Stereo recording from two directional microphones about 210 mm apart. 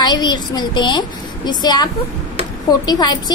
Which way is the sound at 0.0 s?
20° left (ahead or behind).